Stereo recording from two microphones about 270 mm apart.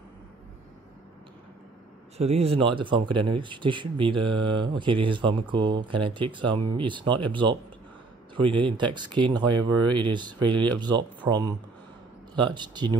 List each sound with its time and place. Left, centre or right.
2.1 s speech: right
8.4 s speech: centre